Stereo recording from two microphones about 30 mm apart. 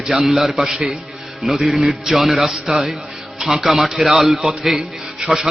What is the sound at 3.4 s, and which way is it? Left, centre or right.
Music, centre.